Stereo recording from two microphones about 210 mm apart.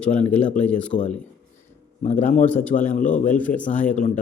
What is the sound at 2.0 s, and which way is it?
A man's voice, 35° left (ahead or behind).